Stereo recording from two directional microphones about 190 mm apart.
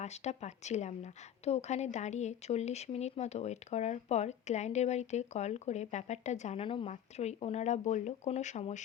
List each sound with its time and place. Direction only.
0.0 s speech: 35° left (ahead or behind)